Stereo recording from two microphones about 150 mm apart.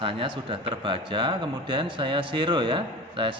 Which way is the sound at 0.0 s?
35° right (ahead or behind).